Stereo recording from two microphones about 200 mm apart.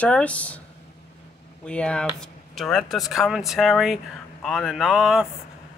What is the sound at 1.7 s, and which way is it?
Speech, 5° left (ahead or behind).